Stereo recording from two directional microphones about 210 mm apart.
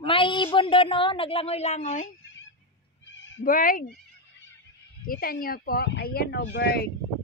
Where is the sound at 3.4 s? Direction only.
40° left (ahead or behind).